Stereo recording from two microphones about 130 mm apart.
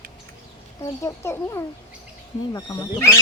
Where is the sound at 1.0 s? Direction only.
20° left (ahead or behind).